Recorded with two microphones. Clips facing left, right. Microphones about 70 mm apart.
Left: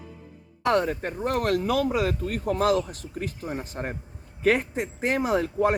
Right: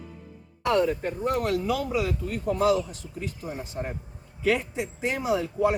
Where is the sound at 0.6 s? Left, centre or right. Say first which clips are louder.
Even; left.